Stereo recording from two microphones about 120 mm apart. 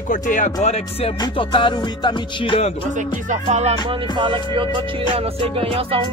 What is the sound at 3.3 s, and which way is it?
Music, 70° right (ahead or behind).